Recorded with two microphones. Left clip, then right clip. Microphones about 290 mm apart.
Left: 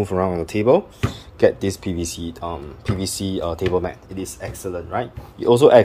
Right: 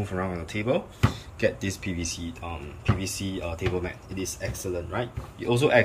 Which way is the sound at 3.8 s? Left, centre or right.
Centre.